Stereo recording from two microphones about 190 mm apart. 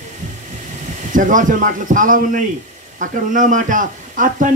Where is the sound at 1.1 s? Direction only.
45° right (ahead or behind).